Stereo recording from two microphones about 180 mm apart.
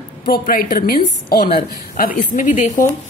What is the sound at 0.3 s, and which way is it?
A woman's voice, 55° left (ahead or behind).